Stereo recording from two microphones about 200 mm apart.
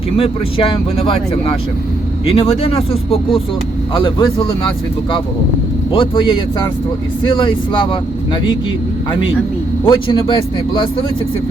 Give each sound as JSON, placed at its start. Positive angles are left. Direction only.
{"t": 0.2, "sound": "speech", "side_deg": 25}
{"t": 5.9, "sound": "speech", "side_deg": 25}
{"t": 9.8, "sound": "speech", "side_deg": 25}